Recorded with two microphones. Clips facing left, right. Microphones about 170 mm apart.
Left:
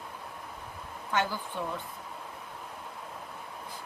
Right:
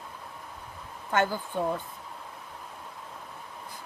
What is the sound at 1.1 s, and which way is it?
Speech, 50° right (ahead or behind).